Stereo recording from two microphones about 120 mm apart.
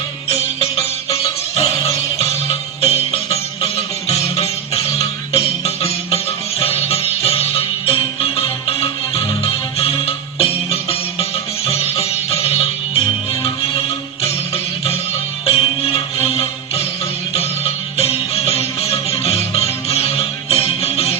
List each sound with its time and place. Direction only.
0.3 s music: 60° left (ahead or behind)
6.6 s music: 55° left (ahead or behind)
12.3 s sitar: 55° left (ahead or behind)
13.6 s music: 55° left (ahead or behind)